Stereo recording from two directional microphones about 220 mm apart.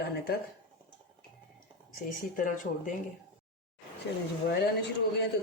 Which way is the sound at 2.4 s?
35° left (ahead or behind).